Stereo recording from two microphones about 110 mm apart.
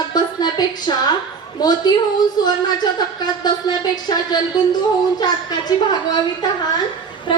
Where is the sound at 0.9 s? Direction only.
45° left (ahead or behind).